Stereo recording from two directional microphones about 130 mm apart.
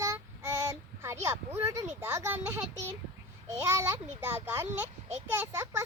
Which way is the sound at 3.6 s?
20° right (ahead or behind).